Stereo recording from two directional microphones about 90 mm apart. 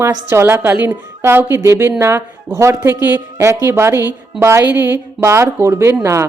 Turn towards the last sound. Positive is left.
turn(degrees=-30)  # may be behind; listen again after turning